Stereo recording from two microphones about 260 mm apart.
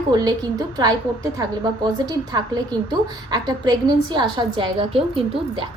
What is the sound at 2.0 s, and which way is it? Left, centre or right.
A woman's voice, centre.